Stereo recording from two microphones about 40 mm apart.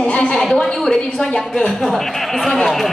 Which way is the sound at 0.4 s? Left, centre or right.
Centre.